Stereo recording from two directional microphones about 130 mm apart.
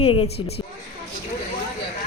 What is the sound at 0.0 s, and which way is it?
Speech, 50° left (ahead or behind).